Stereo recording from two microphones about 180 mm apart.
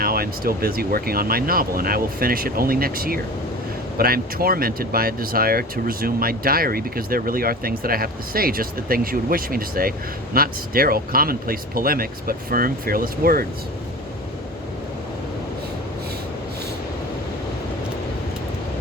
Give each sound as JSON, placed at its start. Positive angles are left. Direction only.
{"t": 0.0, "sound": "speech", "side_deg": -55}